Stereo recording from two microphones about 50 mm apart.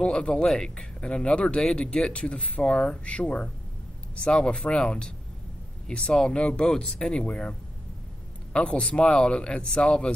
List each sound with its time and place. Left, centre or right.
0.0 s speech: centre
8.5 s speech: centre